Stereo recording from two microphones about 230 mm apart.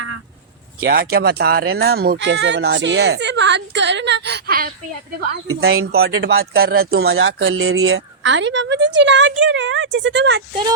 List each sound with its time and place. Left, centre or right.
0.8 s a woman's voice: right
5.5 s speech: right
6.0 s a woman's voice: right
7.1 s a woman's voice: right